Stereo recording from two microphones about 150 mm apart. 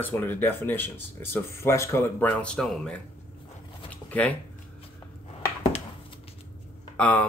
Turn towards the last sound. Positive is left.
turn(degrees=10)  # may be behind; listen again after turning